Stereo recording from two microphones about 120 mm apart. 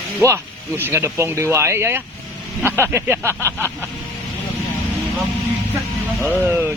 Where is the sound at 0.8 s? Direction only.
20° right (ahead or behind).